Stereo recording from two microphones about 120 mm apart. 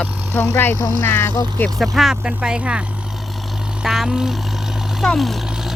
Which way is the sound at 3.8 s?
5° right (ahead or behind).